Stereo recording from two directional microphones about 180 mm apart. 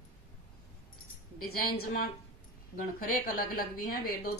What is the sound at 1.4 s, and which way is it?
Speech, 55° left (ahead or behind).